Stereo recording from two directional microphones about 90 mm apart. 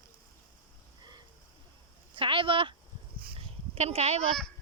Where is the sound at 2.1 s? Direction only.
75° right (ahead or behind).